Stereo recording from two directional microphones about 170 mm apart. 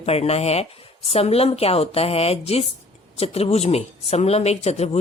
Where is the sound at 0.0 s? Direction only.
35° left (ahead or behind).